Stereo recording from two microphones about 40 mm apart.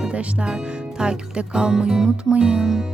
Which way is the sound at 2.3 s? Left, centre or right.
Right.